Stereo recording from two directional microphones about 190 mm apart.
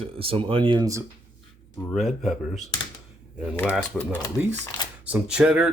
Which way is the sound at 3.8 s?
10° left (ahead or behind).